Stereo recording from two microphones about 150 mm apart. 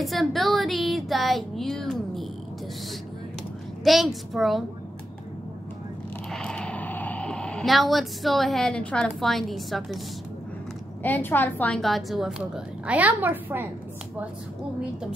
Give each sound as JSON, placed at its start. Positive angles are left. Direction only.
{"t": 0.0, "sound": "speech", "side_deg": 0}
{"t": 3.8, "sound": "a woman's voice", "side_deg": 0}
{"t": 6.3, "sound": "speech", "side_deg": 5}
{"t": 11.0, "sound": "a woman's voice", "side_deg": 10}